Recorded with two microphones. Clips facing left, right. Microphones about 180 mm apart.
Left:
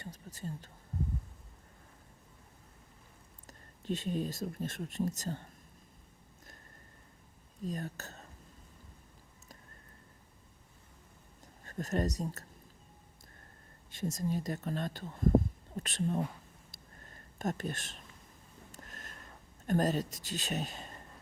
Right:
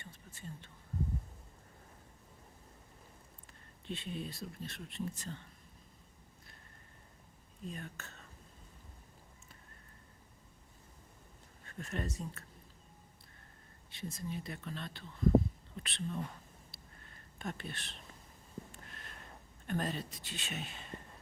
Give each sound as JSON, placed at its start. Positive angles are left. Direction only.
{"t": 0.0, "sound": "a sound", "side_deg": 40}
{"t": 3.4, "sound": "speech", "side_deg": 40}
{"t": 7.6, "sound": "speech", "side_deg": 40}
{"t": 11.6, "sound": "speech", "side_deg": 40}
{"t": 13.9, "sound": "speech", "side_deg": 45}
{"t": 16.7, "sound": "a sound", "side_deg": 40}
{"t": 19.6, "sound": "speech", "side_deg": 40}